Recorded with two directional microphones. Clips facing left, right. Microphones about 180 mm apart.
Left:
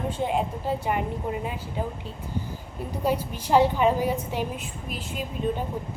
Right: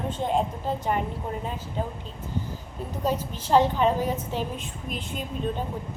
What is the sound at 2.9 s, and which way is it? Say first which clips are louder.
A woman's voice: left 1 dB; 10° left (ahead or behind).